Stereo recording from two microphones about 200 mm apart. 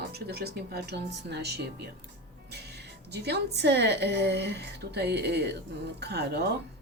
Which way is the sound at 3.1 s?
55° right (ahead or behind).